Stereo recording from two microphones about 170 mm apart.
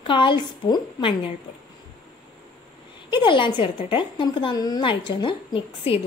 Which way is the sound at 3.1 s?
30° left (ahead or behind).